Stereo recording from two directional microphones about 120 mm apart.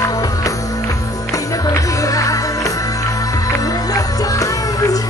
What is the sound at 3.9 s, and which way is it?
Music, 30° left (ahead or behind).